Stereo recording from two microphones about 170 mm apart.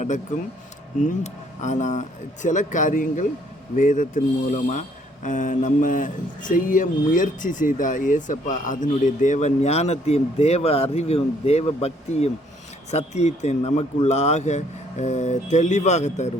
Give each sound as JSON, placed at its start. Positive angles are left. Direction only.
{"t": 1.0, "sound": "a man's voice", "side_deg": 45}